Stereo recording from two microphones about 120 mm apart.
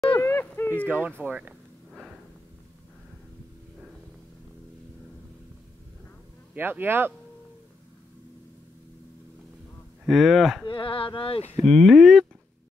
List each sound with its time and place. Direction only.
0.2 s a sound: 20° left (ahead or behind)
0.8 s speech: 15° right (ahead or behind)
1.9 s a sound: 5° right (ahead or behind)
6.5 s speech: 15° right (ahead or behind)
10.0 s speech: centre (ahead or behind)
10.7 s speech: 45° left (ahead or behind)
11.6 s speech: centre (ahead or behind)